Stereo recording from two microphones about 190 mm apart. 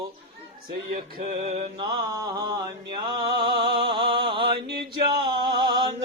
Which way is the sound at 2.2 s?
20° right (ahead or behind).